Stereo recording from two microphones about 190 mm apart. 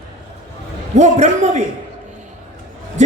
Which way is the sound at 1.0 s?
35° right (ahead or behind).